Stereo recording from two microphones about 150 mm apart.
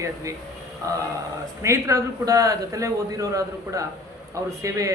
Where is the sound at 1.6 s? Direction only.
20° right (ahead or behind).